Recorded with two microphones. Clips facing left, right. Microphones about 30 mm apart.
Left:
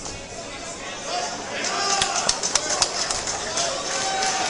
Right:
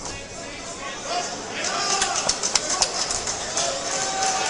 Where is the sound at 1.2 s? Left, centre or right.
Centre.